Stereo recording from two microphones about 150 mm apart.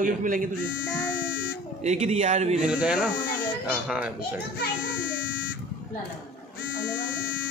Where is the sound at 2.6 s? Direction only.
5° right (ahead or behind).